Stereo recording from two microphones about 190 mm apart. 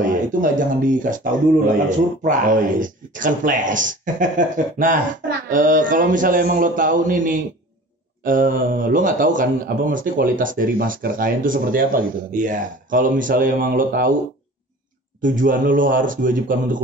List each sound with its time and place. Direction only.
0.0 s a man's voice: 45° right (ahead or behind)
15.2 s a man's voice: 45° right (ahead or behind)